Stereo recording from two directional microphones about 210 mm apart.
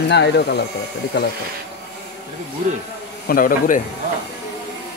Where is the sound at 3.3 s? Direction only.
40° left (ahead or behind).